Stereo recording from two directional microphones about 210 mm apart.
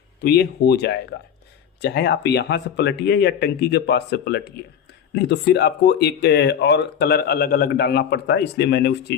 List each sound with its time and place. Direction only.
0.2 s speech: 50° left (ahead or behind)